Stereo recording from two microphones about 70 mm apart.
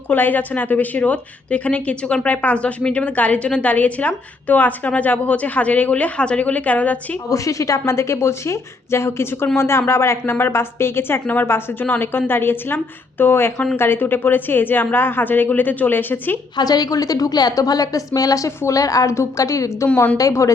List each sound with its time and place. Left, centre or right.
0.1 s a woman's voice: left
7.3 s a woman's voice: left
16.6 s a woman's voice: left